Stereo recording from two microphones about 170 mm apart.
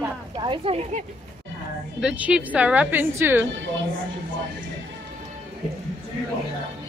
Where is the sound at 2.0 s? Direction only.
5° right (ahead or behind).